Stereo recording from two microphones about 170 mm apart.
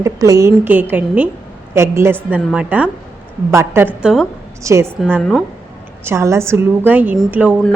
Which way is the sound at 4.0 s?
5° right (ahead or behind).